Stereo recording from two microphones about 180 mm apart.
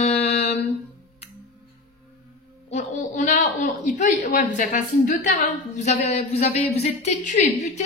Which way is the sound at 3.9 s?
45° left (ahead or behind).